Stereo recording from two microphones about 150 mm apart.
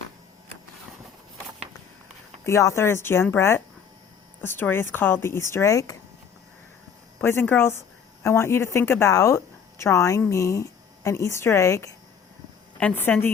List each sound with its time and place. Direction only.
2.4 s speech: 20° left (ahead or behind)
7.2 s a woman's voice: 15° left (ahead or behind)